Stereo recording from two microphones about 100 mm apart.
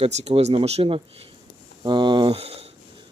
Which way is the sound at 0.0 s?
85° right.